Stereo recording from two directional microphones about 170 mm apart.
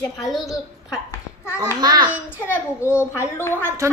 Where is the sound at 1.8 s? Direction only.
25° right (ahead or behind).